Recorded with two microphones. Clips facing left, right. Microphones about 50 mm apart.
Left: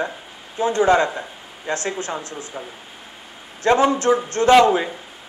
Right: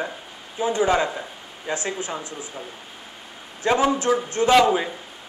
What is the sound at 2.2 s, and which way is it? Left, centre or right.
Speech, centre.